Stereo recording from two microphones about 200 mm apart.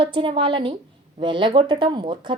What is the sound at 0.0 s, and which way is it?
A woman's voice, 25° right (ahead or behind).